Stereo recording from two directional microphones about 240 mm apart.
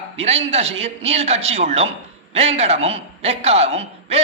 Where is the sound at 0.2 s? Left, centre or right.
Right.